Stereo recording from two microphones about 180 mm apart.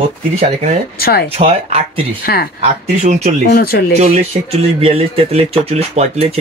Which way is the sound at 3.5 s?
55° left (ahead or behind).